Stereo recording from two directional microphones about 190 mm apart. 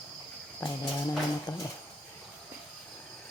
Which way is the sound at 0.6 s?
20° left (ahead or behind).